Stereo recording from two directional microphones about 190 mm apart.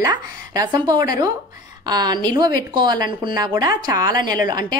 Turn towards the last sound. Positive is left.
turn(degrees=-20)  # may be behind; listen again after turning